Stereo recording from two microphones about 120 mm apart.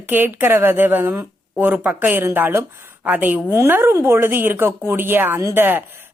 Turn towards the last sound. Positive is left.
turn(degrees=-15)  # may be behind; listen again after turning